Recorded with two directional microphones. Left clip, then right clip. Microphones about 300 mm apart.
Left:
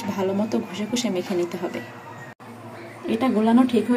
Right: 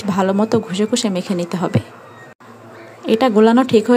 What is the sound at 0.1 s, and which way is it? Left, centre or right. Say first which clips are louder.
A woman's voice: right 9 dB; right.